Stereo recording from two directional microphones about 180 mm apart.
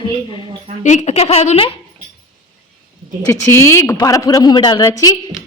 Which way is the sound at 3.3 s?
15° left (ahead or behind).